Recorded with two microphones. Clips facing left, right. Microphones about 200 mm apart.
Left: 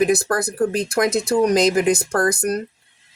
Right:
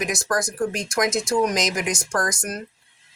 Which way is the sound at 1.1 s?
60° left (ahead or behind).